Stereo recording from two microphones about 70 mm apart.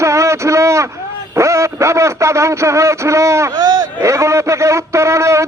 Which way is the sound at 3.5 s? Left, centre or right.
Right.